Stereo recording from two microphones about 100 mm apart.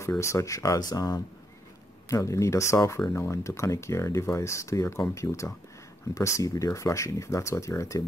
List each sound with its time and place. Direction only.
0.2 s speech: 30° left (ahead or behind)